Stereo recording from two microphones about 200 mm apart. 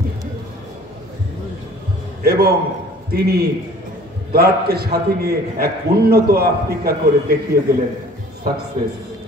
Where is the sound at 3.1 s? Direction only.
50° right (ahead or behind).